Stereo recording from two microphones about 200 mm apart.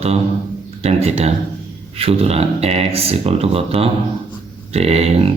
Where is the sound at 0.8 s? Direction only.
30° right (ahead or behind).